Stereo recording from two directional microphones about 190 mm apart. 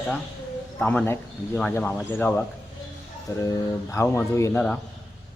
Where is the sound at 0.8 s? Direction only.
5° left (ahead or behind).